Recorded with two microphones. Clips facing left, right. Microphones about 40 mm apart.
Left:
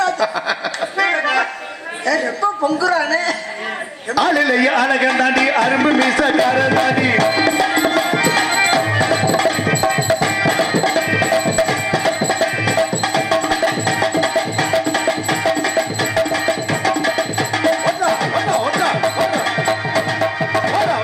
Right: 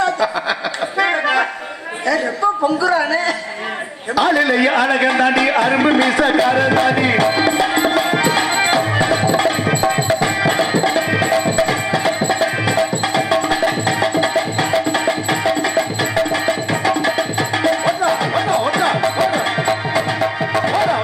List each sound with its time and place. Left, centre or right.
0.0 s chuckle: right
0.9 s a sound: centre
2.6 s a man's voice: centre
7.3 s music: centre
20.0 s music: centre